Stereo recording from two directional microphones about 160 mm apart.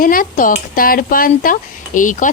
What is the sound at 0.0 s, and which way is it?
Speech, 60° left (ahead or behind).